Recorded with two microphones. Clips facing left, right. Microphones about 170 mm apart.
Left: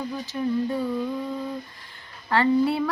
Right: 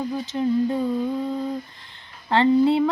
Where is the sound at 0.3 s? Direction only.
25° right (ahead or behind).